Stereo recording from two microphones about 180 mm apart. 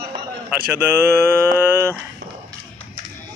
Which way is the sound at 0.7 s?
10° right (ahead or behind).